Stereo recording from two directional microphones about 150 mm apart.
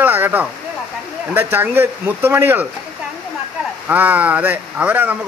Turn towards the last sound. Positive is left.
turn(degrees=-10)  # may be behind; listen again after turning